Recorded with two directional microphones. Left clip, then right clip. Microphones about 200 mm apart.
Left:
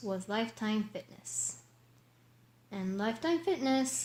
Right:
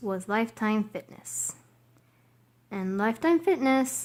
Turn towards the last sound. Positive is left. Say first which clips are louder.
# right 7 dB
turn(degrees=-45)  # may be behind; listen again after turning